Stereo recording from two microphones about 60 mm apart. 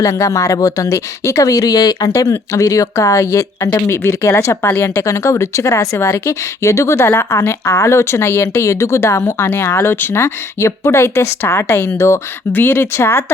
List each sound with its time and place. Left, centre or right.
0.0 s speech: left
3.8 s speech: left
4.6 s speech: left
5.0 s speech: left
12.5 s speech: left